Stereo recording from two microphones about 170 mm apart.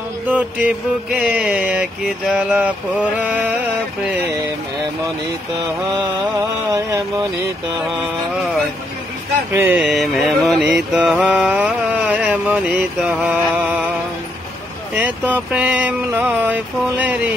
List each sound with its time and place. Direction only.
0.3 s mantra: 10° right (ahead or behind)
6.7 s a sound: 20° right (ahead or behind)
9.8 s mantra: centre (ahead or behind)
15.0 s mantra: 10° right (ahead or behind)